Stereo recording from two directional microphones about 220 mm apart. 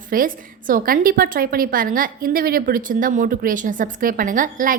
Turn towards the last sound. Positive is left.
turn(degrees=-40)  # may be behind; listen again after turning